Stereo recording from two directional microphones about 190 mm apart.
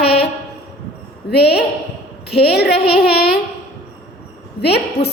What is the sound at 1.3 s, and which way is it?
Child singing, 60° left (ahead or behind).